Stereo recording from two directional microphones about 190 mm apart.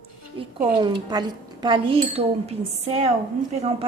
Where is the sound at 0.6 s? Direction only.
25° right (ahead or behind).